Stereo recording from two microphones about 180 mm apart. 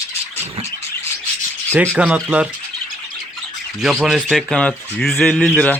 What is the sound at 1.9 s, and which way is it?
Speech, 5° right (ahead or behind).